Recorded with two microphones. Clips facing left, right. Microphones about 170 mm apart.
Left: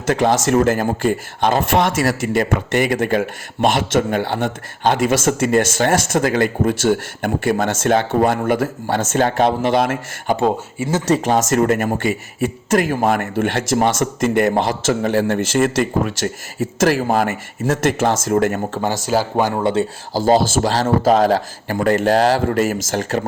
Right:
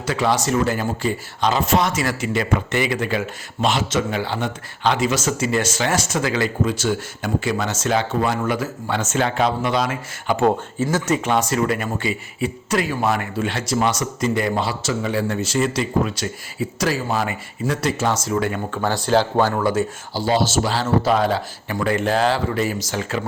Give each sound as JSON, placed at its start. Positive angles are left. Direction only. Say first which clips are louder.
{"t": 0.1, "sound": "speech", "louder": "left 5 dB", "side_deg": 45}
{"t": 10.8, "sound": "speech", "louder": "left 4 dB", "side_deg": 30}
{"t": 19.0, "sound": "speech", "louder": "right 1 dB", "side_deg": 10}
{"t": 19.5, "sound": "speech", "louder": "left 2 dB", "side_deg": 25}
{"t": 20.1, "sound": "speech", "louder": "left 5 dB", "side_deg": 40}